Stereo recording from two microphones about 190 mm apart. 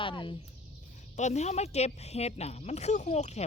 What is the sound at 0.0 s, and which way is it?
Bird, 25° left (ahead or behind).